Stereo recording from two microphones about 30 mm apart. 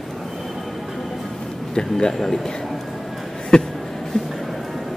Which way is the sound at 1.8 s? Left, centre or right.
Left.